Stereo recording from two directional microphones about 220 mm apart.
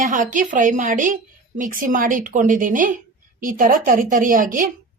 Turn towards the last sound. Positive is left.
turn(degrees=-40)  # may be behind; listen again after turning